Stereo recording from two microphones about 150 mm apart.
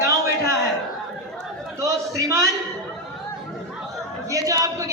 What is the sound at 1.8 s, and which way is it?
Speech, 20° right (ahead or behind).